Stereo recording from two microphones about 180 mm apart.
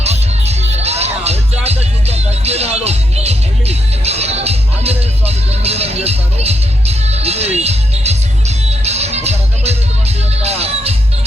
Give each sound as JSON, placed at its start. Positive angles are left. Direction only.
{"t": 0.0, "sound": "music", "side_deg": -35}